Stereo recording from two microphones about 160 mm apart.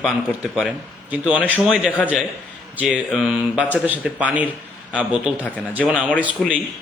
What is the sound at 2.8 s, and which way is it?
Speech, centre (ahead or behind).